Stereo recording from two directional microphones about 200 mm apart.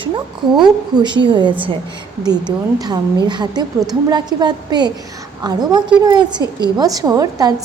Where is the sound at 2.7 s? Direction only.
20° right (ahead or behind).